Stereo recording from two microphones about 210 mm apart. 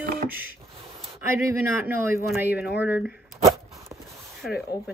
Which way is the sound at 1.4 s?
10° right (ahead or behind).